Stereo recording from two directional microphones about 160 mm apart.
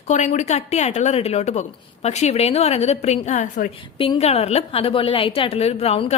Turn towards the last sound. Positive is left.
turn(degrees=40)  # may be behind; listen again after turning